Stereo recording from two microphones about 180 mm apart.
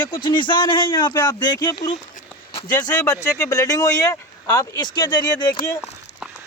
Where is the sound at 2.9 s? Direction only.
15° left (ahead or behind).